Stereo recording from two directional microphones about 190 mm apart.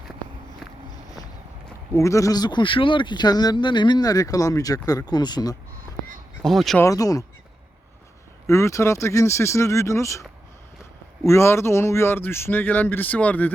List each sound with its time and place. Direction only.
1.9 s speech: 15° left (ahead or behind)
6.4 s speech: centre (ahead or behind)
6.8 s speech: 20° left (ahead or behind)
8.4 s speech: 15° left (ahead or behind)
11.3 s speech: 15° left (ahead or behind)